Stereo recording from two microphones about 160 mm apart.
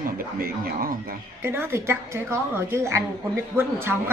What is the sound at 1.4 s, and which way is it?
A woman's voice, 15° right (ahead or behind).